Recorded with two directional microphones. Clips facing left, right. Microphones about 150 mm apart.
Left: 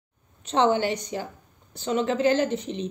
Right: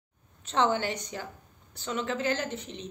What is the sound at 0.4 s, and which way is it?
Speech, 20° left (ahead or behind).